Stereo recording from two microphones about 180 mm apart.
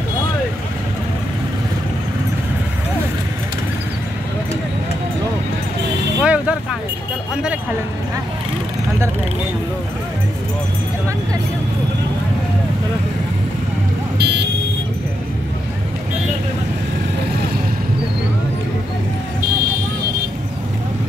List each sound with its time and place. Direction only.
6.2 s vehicle: 5° right (ahead or behind)
14.1 s buzzer: 65° right (ahead or behind)